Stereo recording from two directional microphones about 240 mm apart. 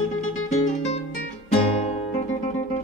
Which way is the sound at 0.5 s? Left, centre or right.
Left.